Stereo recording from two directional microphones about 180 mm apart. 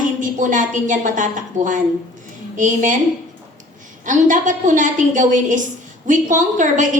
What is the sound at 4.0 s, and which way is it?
A woman's voice, 45° right (ahead or behind).